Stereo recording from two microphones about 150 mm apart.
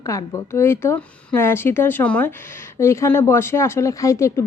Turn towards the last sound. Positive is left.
turn(degrees=20)  # may be behind; listen again after turning